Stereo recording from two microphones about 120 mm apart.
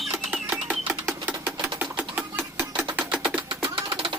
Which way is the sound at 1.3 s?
15° right (ahead or behind).